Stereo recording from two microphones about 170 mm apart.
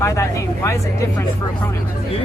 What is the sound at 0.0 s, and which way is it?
Speech, 15° left (ahead or behind).